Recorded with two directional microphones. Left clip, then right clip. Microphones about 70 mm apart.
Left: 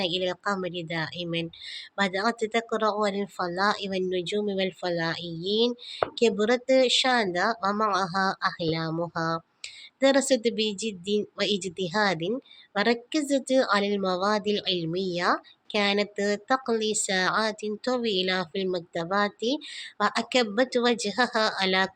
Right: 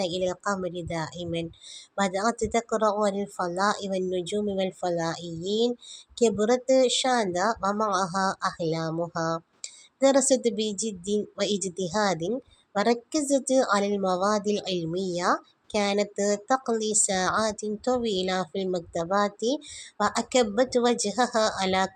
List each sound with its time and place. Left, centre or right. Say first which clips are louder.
0.0 s a woman's voice: even; right